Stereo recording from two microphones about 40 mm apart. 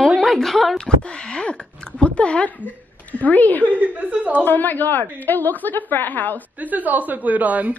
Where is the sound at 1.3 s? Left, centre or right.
Left.